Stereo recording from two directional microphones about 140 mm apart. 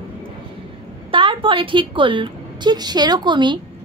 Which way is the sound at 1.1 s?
40° right (ahead or behind).